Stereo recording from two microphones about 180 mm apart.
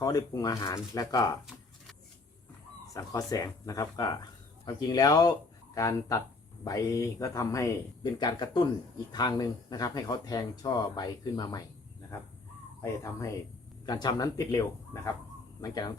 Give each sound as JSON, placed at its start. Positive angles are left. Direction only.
{"t": 0.0, "sound": "speech", "side_deg": 20}
{"t": 2.9, "sound": "speech", "side_deg": 20}
{"t": 12.8, "sound": "speech", "side_deg": 15}